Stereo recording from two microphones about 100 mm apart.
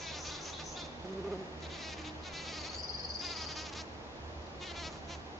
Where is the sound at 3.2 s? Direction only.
Centre (ahead or behind).